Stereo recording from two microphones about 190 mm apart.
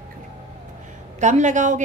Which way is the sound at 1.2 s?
40° right (ahead or behind).